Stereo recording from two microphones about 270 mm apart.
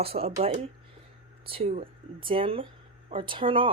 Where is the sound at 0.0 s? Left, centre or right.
Right.